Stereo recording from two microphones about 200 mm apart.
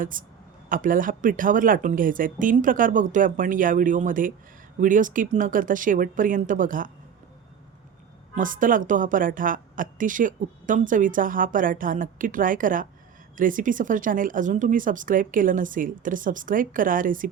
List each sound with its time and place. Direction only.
0.0 s a woman's voice: 40° right (ahead or behind)
8.4 s a woman's voice: 40° right (ahead or behind)